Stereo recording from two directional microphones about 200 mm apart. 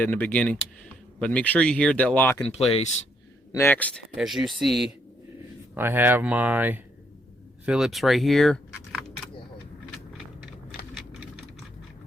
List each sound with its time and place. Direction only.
0.0 s speech: 10° left (ahead or behind)
2.5 s speech: 30° left (ahead or behind)
3.5 s speech: 10° left (ahead or behind)